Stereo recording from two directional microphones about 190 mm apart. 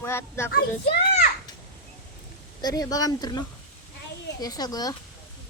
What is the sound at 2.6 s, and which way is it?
Speech, 20° left (ahead or behind).